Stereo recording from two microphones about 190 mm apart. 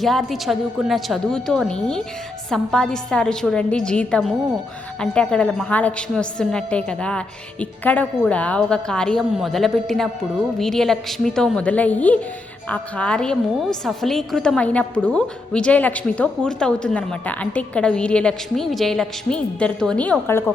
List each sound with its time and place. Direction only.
0.0 s a woman's voice: centre (ahead or behind)